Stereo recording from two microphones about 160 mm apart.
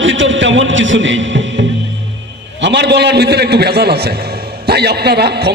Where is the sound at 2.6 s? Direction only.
90° right.